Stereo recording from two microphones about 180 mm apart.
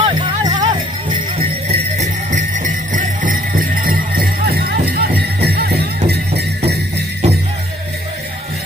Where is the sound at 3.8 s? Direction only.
55° right (ahead or behind).